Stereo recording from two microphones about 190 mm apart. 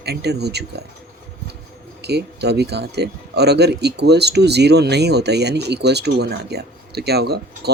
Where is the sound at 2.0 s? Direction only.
60° right (ahead or behind).